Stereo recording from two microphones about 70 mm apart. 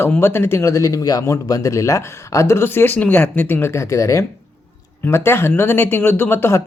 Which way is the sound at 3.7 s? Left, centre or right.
Left.